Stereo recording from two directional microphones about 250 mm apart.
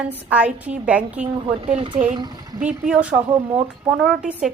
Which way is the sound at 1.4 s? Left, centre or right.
Right.